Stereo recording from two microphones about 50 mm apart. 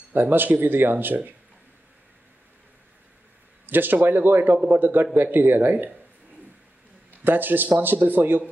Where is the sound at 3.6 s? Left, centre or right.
Right.